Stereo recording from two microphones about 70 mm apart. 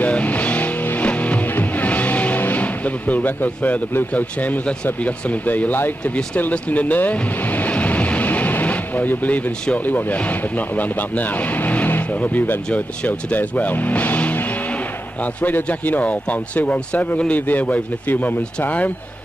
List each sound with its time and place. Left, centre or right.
0.0 s music: left
9.8 s speech: left